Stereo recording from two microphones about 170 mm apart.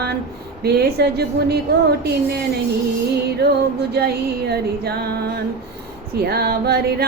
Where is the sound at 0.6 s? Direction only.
70° right (ahead or behind).